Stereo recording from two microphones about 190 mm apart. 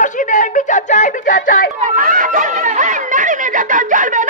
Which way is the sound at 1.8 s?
45° right (ahead or behind).